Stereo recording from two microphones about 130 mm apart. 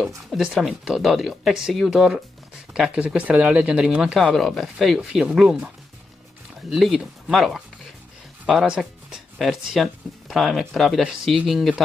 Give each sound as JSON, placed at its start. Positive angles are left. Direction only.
{"t": 0.3, "sound": "speech", "side_deg": 0}
{"t": 6.7, "sound": "speech", "side_deg": -5}